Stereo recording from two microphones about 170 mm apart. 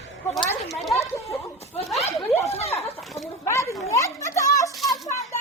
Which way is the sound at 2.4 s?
40° left (ahead or behind).